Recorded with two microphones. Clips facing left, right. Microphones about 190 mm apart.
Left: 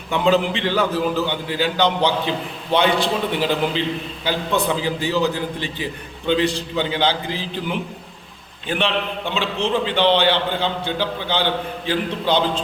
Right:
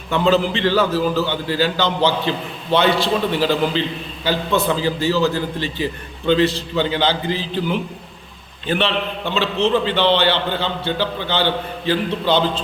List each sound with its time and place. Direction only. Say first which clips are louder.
0.1 s a man's voice: right 1 dB; 15° left (ahead or behind)